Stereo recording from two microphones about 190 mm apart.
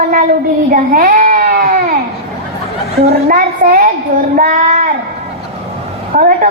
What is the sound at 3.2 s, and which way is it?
Speech, 50° right (ahead or behind).